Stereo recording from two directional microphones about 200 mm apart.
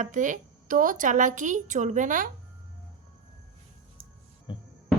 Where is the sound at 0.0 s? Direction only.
40° right (ahead or behind).